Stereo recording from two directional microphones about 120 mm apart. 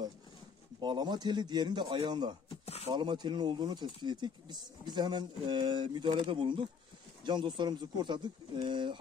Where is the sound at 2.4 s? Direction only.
60° left (ahead or behind).